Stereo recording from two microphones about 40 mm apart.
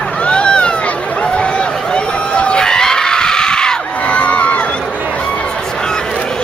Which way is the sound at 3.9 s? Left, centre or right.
Left.